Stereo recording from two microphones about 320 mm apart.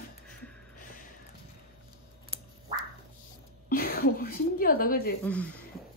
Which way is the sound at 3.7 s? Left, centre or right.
Left.